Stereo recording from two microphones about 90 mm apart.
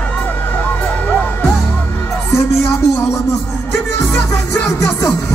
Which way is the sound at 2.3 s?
30° left (ahead or behind).